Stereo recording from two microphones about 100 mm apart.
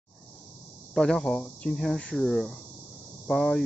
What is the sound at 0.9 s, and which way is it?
Speech, 5° left (ahead or behind).